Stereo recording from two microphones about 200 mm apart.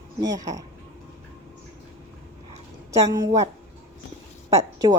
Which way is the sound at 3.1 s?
15° right (ahead or behind).